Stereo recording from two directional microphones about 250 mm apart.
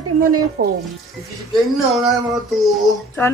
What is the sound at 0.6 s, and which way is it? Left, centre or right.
Speech, right.